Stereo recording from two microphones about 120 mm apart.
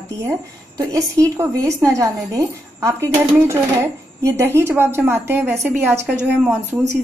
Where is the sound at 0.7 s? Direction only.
30° right (ahead or behind).